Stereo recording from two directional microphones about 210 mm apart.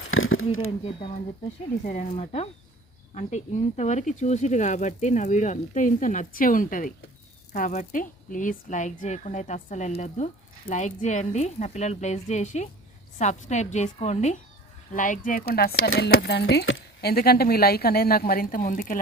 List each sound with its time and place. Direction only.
0.1 s speech: 75° left (ahead or behind)
0.9 s speech: 25° left (ahead or behind)
1.8 s speech: 35° left (ahead or behind)